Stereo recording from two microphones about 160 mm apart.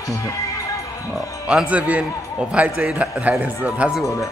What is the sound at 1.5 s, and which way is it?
Speech, 5° right (ahead or behind).